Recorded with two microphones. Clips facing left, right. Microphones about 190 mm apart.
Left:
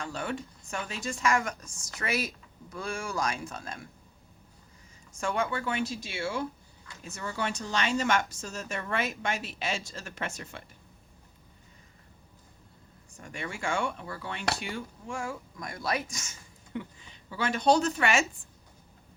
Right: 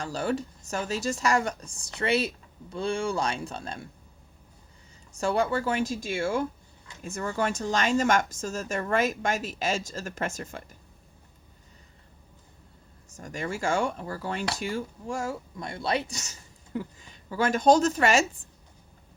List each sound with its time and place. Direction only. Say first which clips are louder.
0.0 s speech: right 6 dB; 35° right (ahead or behind)
5.2 s speech: right 5 dB; 35° right (ahead or behind)
13.1 s speech: right 6 dB; 40° right (ahead or behind)